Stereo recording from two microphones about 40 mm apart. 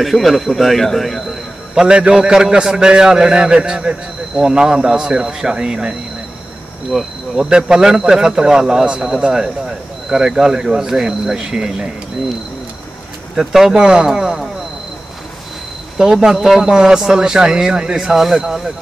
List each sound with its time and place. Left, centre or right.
0.0 s speech: centre
1.8 s a man's voice: right
6.9 s speech: centre
7.3 s speech: centre
13.4 s speech: centre
13.7 s a man's voice: right
14.0 s speech: centre
16.2 s speech: centre